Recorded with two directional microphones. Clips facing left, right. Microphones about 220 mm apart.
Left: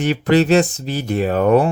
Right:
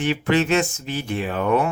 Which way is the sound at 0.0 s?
40° left (ahead or behind).